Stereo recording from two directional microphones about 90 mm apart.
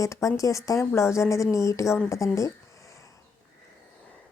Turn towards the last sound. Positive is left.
turn(degrees=35)  # may be behind; listen again after turning